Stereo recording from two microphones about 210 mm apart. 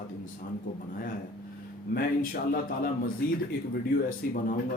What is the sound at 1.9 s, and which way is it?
Speech, 45° left (ahead or behind).